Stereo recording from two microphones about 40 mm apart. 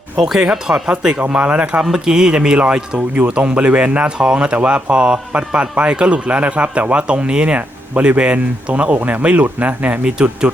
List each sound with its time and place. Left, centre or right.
0.2 s speech: centre
0.9 s speech: right
1.4 s a man's voice: right
1.8 s speech: centre; by 4.1 s right
4.2 s a man's voice: right
10.0 s speech: right